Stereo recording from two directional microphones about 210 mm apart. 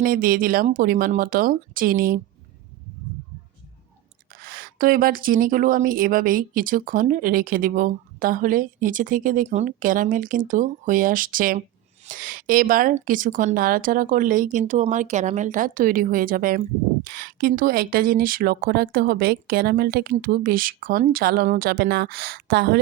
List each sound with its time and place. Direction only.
0.0 s speech: 40° right (ahead or behind)
4.4 s speech: 45° right (ahead or behind)